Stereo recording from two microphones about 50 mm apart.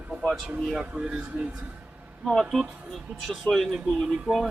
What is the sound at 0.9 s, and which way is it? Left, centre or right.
Speech, centre.